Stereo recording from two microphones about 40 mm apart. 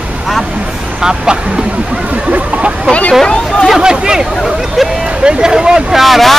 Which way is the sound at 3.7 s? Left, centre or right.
Centre.